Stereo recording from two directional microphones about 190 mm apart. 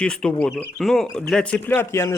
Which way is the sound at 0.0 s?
5° left (ahead or behind).